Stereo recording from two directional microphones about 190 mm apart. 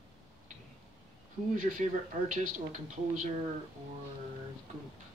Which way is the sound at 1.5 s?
40° right (ahead or behind).